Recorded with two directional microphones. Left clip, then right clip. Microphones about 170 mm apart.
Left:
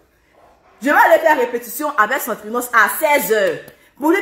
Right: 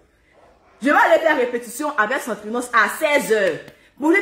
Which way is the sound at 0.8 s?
15° right (ahead or behind).